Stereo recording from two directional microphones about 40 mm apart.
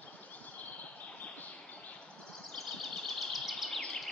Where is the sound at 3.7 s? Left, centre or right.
Centre.